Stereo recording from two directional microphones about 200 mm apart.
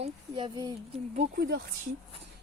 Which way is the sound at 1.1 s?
45° right (ahead or behind).